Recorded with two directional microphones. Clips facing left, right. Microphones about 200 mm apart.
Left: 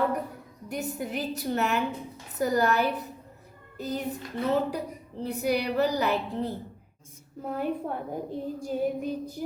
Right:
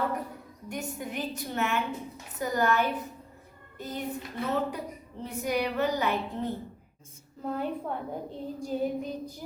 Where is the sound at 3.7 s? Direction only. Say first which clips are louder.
Left 5 dB; 35° left (ahead or behind).